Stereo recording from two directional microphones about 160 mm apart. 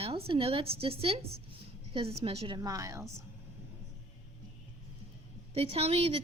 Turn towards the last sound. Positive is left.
turn(degrees=-40)  # may be behind; listen again after turning